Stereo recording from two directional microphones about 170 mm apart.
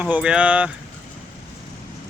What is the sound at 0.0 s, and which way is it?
Speech, 5° right (ahead or behind).